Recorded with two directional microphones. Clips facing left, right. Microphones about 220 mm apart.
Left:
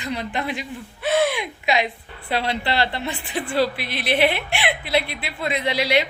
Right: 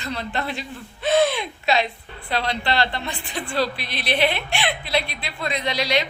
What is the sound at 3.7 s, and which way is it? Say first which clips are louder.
Speech: left 2 dB; 20° right (ahead or behind).